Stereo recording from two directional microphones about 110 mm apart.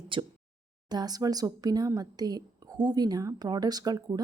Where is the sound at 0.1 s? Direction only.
50° right (ahead or behind).